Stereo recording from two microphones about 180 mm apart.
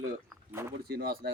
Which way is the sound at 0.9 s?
60° right (ahead or behind).